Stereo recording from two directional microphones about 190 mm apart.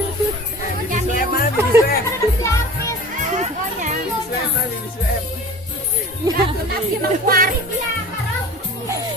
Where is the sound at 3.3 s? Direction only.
40° right (ahead or behind).